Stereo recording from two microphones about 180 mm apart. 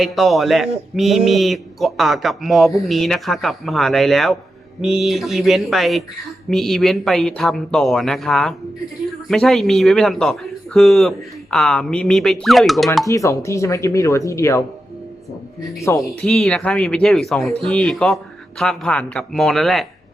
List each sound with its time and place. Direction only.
0.0 s speech: centre (ahead or behind)
13.1 s speech: 15° left (ahead or behind)
16.0 s speech: centre (ahead or behind)